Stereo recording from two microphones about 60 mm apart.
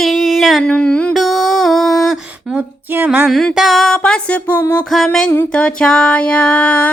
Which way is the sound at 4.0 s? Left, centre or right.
Centre.